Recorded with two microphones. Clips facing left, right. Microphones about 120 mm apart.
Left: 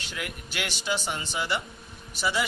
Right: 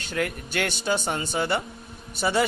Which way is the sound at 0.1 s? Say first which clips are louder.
Right 10 dB; 50° right (ahead or behind).